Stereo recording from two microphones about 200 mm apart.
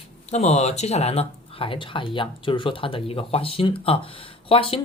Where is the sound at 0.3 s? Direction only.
35° left (ahead or behind).